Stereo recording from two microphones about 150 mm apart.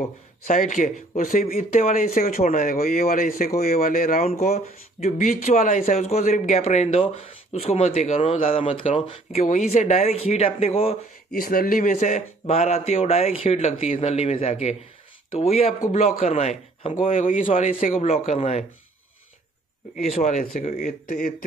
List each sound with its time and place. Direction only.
0.5 s speech: 55° left (ahead or behind)
4.3 s speech: 50° left (ahead or behind)
11.3 s speech: 75° left (ahead or behind); by 18.7 s 45° left (ahead or behind)
20.0 s speech: 50° left (ahead or behind)